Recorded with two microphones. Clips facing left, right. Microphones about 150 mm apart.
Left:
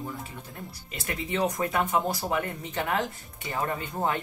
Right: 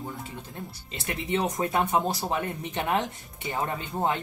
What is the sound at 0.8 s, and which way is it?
Speech, 25° right (ahead or behind).